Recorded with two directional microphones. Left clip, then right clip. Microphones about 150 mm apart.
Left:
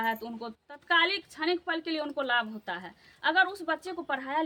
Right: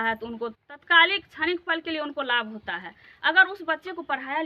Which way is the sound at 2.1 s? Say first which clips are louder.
Right 2 dB; 20° left (ahead or behind).